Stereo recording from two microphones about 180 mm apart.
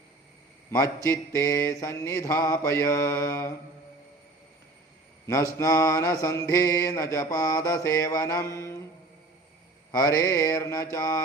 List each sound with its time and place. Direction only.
0.7 s mantra: 15° left (ahead or behind)
5.2 s mantra: 15° left (ahead or behind)
9.9 s mantra: 15° left (ahead or behind)